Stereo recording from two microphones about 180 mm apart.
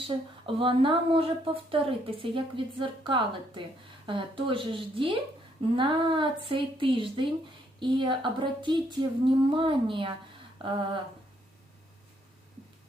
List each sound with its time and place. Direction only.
0.1 s speech: 30° right (ahead or behind)